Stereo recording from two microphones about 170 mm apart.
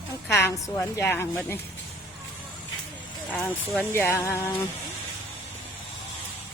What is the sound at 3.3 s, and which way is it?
A woman's voice, 5° left (ahead or behind).